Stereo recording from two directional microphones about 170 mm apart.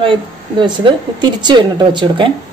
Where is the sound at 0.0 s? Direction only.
30° right (ahead or behind).